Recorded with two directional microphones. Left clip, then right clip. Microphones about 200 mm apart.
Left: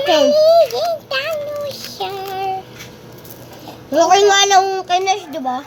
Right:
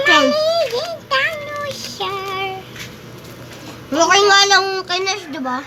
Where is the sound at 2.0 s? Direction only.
20° left (ahead or behind).